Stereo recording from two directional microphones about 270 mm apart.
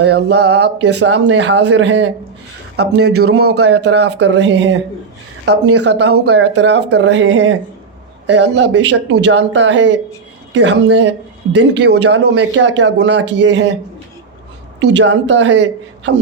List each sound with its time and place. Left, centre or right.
0.0 s speech: right
5.8 s speech: right
14.8 s speech: right